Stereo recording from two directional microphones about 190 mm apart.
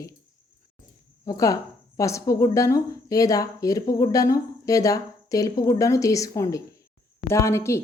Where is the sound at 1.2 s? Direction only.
15° left (ahead or behind).